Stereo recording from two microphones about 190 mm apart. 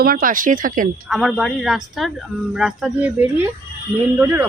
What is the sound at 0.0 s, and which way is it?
Speech, 50° right (ahead or behind).